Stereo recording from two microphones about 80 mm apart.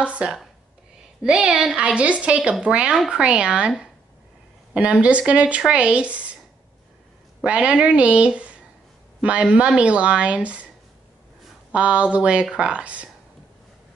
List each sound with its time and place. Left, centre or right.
0.0 s speech: centre
4.7 s speech: centre
7.4 s speech: centre
11.7 s speech: centre